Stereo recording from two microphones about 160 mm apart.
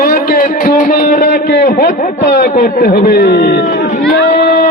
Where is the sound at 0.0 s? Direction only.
65° left (ahead or behind).